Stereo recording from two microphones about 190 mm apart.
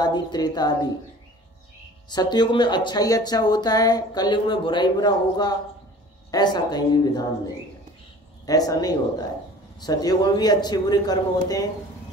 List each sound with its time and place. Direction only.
0.0 s speech: 20° left (ahead or behind)
2.0 s speech: 20° left (ahead or behind)
8.5 s speech: 20° left (ahead or behind)